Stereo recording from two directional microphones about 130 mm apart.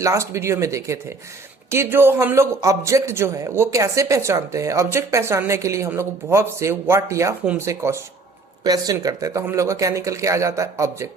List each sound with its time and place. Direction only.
0.0 s a man's voice: 25° right (ahead or behind)